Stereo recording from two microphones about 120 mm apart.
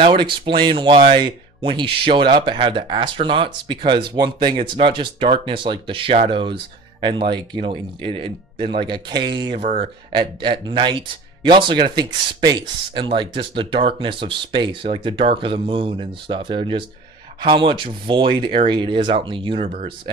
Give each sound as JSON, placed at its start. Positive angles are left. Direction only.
{"t": 0.0, "sound": "speech", "side_deg": -45}